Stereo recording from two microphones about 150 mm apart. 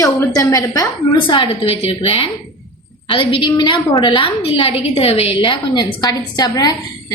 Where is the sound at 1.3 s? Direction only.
35° left (ahead or behind).